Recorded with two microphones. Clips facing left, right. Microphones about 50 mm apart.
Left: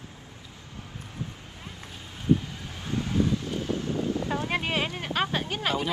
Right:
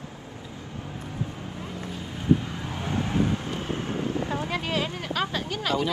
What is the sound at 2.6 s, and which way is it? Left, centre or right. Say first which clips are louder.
Vehicle: right 2 dB; right.